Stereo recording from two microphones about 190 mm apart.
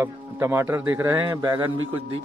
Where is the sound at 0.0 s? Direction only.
15° right (ahead or behind).